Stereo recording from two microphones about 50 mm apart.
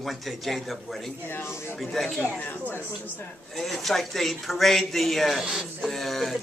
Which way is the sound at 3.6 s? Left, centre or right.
Centre.